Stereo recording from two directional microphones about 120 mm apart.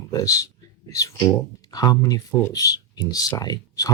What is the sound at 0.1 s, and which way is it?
Speech, 30° left (ahead or behind).